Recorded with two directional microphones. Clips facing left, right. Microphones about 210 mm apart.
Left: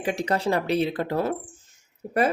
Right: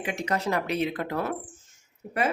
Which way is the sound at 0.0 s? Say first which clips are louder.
Left 4 dB; 35° left (ahead or behind).